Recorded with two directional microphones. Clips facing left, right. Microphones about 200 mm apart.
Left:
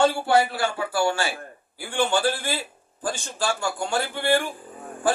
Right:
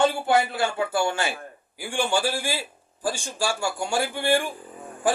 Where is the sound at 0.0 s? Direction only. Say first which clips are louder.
Left 1 dB; 20° right (ahead or behind).